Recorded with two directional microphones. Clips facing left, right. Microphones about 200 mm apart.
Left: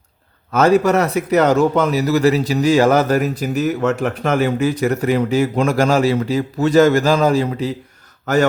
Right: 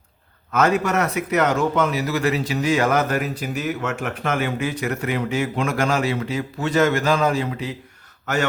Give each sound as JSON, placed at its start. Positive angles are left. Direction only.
{"t": 0.5, "sound": "a man's voice", "side_deg": 35}